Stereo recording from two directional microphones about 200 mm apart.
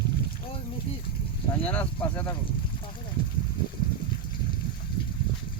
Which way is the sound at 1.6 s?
5° left (ahead or behind).